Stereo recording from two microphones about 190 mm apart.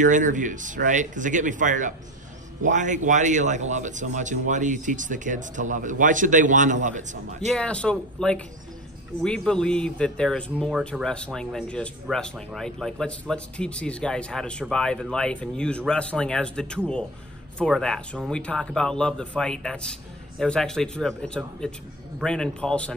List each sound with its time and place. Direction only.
0.0 s speech: 40° right (ahead or behind)
7.4 s speech: 5° left (ahead or behind)